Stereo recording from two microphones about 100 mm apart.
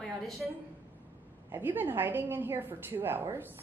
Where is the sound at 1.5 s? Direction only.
20° right (ahead or behind).